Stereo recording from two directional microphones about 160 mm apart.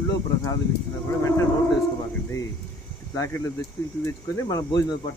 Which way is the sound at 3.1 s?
20° left (ahead or behind).